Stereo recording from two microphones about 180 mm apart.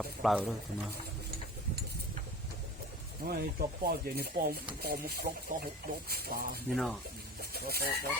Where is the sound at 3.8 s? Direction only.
60° right (ahead or behind).